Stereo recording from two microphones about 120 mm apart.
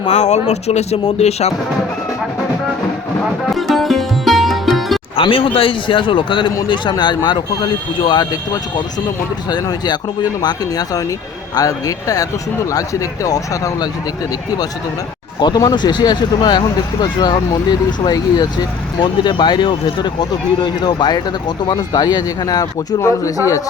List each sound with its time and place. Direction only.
0.1 s speech: 80° left
3.5 s music: centre (ahead or behind)
5.1 s a man's voice: 50° left (ahead or behind)
9.5 s speech: 35° left (ahead or behind)
15.4 s speech: 35° left (ahead or behind)